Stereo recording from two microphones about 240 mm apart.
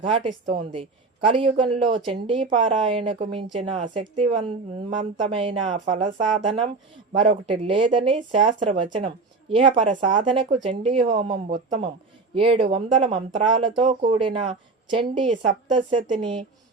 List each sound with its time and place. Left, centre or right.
0.1 s speech: right
7.1 s speech: right